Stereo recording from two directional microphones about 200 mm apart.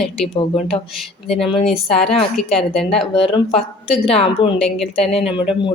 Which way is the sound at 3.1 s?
25° left (ahead or behind).